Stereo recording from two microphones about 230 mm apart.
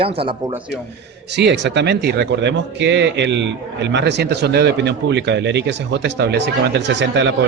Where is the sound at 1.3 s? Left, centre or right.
Right.